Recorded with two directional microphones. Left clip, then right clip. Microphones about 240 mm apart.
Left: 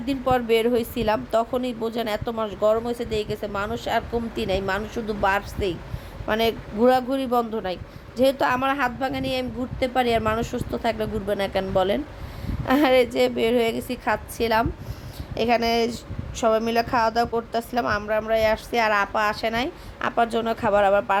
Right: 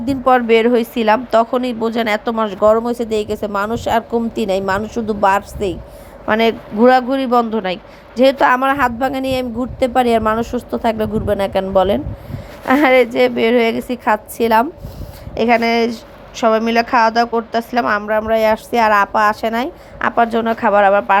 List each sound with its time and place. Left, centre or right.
0.0 s a man's voice: centre
2.6 s a man's voice: right; by 21.2 s centre